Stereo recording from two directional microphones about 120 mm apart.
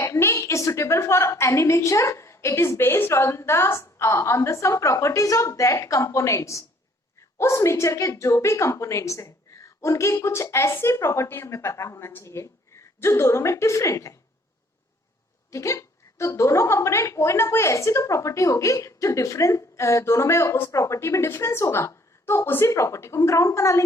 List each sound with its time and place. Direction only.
0.0 s a woman's voice: 25° left (ahead or behind)
15.4 s a woman's voice: 25° left (ahead or behind)